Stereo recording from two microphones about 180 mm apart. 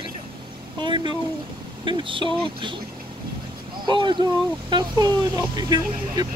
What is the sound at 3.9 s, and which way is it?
Speech, 25° right (ahead or behind).